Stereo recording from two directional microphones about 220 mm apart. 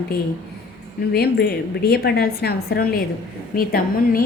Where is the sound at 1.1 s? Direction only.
45° left (ahead or behind).